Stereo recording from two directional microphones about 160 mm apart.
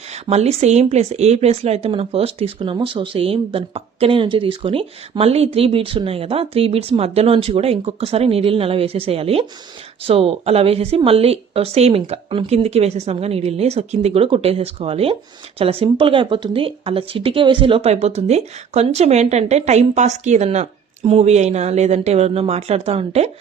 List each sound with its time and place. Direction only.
0.1 s speech: 45° right (ahead or behind)